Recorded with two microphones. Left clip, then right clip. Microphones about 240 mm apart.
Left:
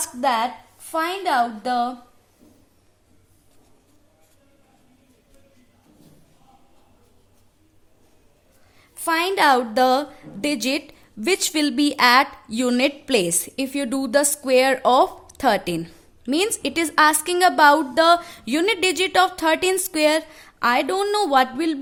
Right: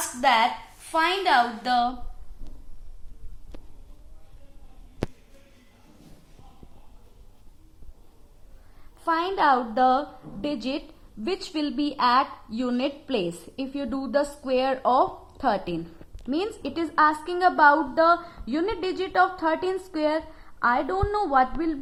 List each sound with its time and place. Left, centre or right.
0.2 s a woman's voice: left
9.0 s a woman's voice: left